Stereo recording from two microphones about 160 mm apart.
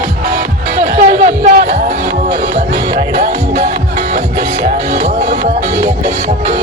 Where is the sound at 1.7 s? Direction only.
45° right (ahead or behind).